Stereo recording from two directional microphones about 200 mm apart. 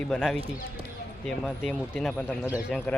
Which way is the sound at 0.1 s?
Centre (ahead or behind).